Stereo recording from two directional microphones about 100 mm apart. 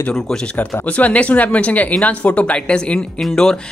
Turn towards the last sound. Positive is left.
turn(degrees=5)  # may be behind; listen again after turning